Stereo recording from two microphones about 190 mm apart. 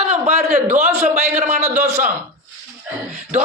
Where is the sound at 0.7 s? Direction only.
15° right (ahead or behind).